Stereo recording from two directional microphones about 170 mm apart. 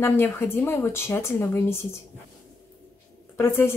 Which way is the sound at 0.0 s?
15° left (ahead or behind).